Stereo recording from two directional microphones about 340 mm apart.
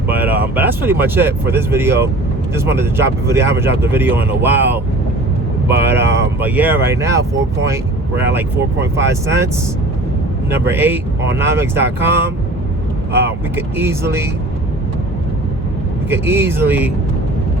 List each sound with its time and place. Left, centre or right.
0.1 s a sound: centre
0.5 s speech: centre
10.7 s speech: centre
16.0 s speech: centre